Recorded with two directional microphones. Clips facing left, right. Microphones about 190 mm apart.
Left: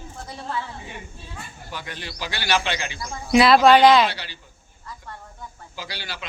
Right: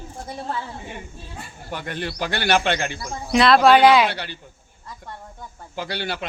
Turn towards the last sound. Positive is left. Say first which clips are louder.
# right 8 dB
turn(degrees=-55)  # may be behind; listen again after turning